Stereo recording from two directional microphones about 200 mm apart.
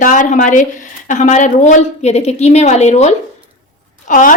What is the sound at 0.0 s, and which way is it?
A woman's voice, 40° left (ahead or behind).